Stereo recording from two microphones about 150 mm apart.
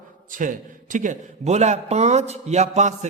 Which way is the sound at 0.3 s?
60° right (ahead or behind).